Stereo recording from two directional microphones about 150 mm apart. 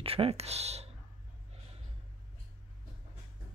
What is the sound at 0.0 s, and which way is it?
Speech, 40° right (ahead or behind).